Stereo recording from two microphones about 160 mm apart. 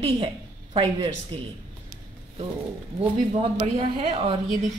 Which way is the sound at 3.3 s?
35° right (ahead or behind).